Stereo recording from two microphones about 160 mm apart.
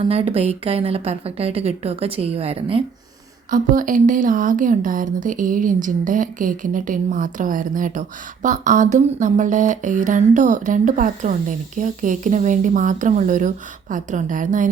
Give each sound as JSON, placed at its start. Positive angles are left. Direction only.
{"t": 0.0, "sound": "a woman's voice", "side_deg": -35}
{"t": 3.5, "sound": "speech", "side_deg": -55}